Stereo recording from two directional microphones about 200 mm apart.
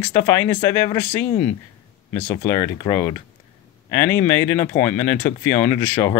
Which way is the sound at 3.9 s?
15° left (ahead or behind).